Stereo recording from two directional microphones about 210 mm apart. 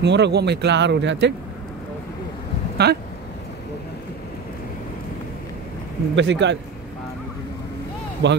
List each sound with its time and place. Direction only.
0.0 s speech: 55° right (ahead or behind)
2.8 s speech: 50° right (ahead or behind)
6.1 s speech: 60° right (ahead or behind)
8.2 s speech: 55° right (ahead or behind)